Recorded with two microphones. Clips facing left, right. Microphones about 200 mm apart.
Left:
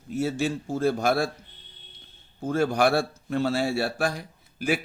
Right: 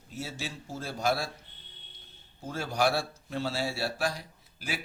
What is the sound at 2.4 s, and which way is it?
Speech, 55° left (ahead or behind).